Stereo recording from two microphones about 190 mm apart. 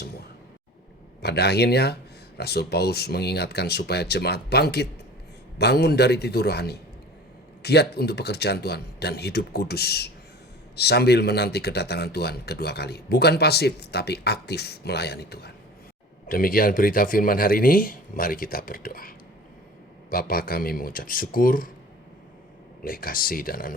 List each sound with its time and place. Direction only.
1.2 s speech: 60° left (ahead or behind)
22.8 s speech: 50° left (ahead or behind)